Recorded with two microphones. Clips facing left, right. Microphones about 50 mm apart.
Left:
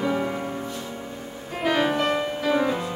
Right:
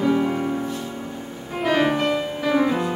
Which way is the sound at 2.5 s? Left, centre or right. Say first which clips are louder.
Right 5 dB; centre.